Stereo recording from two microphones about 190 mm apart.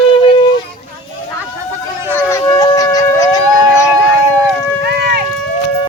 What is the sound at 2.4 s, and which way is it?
Wind instrument, 25° left (ahead or behind).